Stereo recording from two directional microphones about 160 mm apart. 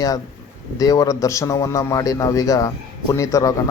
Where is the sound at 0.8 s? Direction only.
20° left (ahead or behind).